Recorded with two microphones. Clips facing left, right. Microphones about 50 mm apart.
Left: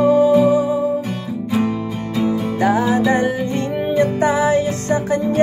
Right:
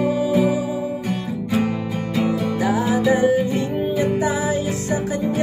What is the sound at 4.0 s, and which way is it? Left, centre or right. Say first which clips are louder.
Music: left 6 dB; left.